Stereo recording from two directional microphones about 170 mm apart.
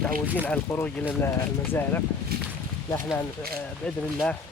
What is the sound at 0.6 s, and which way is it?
Speech, 10° left (ahead or behind).